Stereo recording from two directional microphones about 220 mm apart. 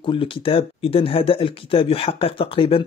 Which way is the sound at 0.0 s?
25° left (ahead or behind).